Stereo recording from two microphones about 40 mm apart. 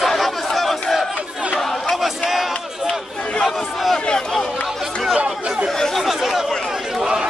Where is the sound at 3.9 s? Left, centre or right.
Centre.